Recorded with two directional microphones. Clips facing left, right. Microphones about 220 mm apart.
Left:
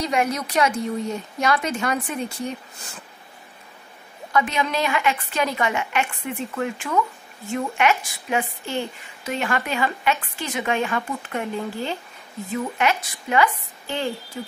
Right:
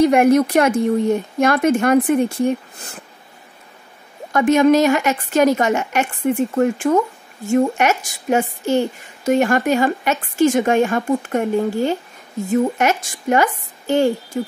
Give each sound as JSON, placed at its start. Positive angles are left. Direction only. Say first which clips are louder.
{"t": 0.0, "sound": "a woman's voice", "louder": "right 11 dB", "side_deg": -55}
{"t": 4.3, "sound": "a woman's voice", "louder": "right 11 dB", "side_deg": -45}